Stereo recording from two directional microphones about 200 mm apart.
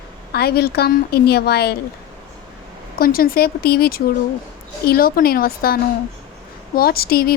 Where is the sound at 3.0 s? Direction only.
45° left (ahead or behind).